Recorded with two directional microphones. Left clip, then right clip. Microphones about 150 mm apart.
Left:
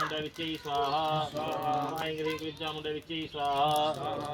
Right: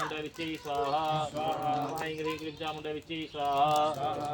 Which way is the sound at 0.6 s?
15° left (ahead or behind).